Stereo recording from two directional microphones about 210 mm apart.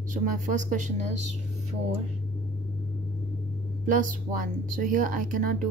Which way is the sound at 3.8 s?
40° right (ahead or behind).